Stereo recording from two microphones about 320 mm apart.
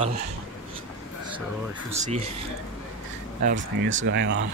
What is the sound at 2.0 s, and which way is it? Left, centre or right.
Speech, right.